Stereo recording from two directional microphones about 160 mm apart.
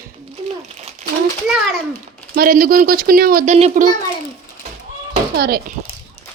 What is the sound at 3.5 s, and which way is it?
Speech, 45° right (ahead or behind).